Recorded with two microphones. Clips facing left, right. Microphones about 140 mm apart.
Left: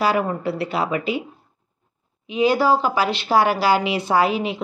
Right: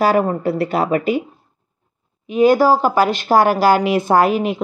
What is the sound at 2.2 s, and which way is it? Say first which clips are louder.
Speech: right 5 dB; 50° right (ahead or behind).